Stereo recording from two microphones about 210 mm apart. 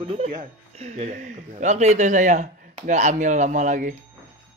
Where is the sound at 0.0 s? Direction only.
30° right (ahead or behind).